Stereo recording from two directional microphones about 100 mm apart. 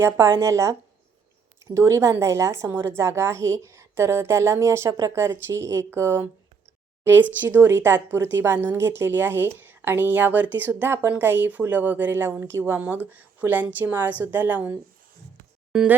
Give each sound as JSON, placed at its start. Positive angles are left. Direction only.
{"t": 0.0, "sound": "a woman's voice", "side_deg": -25}